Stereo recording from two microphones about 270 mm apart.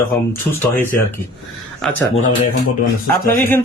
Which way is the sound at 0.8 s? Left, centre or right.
Centre.